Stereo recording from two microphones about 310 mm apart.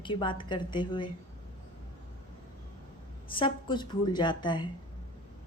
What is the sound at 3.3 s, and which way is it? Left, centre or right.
A woman's voice, centre.